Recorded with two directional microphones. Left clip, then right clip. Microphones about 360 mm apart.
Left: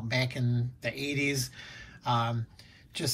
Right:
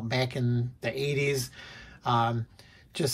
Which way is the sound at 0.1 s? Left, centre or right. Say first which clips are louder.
Right 2 dB; centre.